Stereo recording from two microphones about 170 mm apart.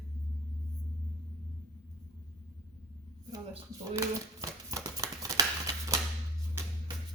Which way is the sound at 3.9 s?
20° right (ahead or behind).